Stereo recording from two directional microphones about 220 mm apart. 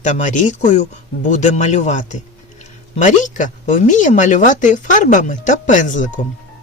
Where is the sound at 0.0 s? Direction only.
35° left (ahead or behind).